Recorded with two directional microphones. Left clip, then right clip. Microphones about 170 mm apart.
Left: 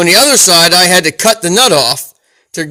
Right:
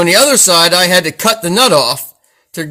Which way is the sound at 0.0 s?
30° left (ahead or behind).